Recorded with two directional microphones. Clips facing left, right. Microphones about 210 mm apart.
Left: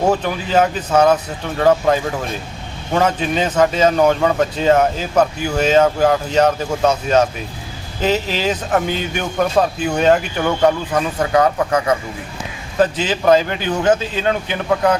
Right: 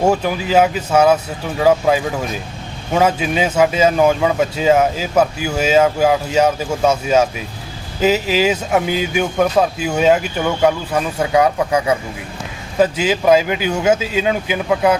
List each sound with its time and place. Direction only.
0.1 s a man's voice: 10° right (ahead or behind)